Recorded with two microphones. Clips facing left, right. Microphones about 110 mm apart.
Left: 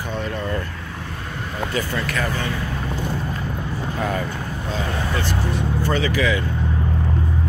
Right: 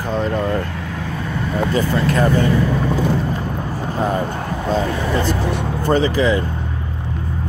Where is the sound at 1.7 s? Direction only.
35° right (ahead or behind).